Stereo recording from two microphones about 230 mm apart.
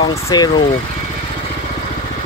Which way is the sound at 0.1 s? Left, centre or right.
Centre.